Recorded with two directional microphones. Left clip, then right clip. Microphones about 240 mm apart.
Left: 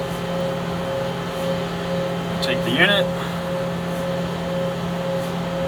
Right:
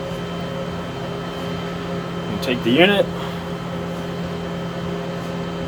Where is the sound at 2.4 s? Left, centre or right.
Right.